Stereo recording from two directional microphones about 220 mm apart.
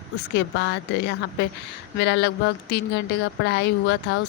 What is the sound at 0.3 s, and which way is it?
Speech, 50° left (ahead or behind).